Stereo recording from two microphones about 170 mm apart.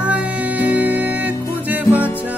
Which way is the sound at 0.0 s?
10° right (ahead or behind).